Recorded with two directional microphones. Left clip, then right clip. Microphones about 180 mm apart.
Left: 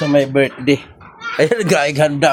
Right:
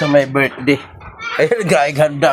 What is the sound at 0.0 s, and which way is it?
Speech, 25° left (ahead or behind).